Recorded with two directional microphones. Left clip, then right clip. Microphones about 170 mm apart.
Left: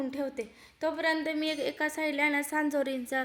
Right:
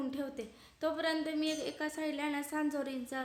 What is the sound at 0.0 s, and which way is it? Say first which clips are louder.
Speech: left 6 dB; 5° left (ahead or behind).